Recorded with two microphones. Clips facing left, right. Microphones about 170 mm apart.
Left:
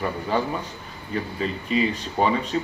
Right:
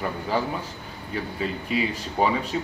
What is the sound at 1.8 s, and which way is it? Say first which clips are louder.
Speech: left 2 dB; 10° right (ahead or behind).